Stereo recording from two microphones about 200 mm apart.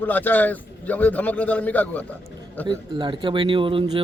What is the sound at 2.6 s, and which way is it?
Speech, 25° right (ahead or behind).